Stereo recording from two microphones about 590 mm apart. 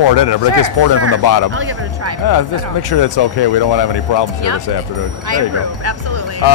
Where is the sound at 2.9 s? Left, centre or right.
Left.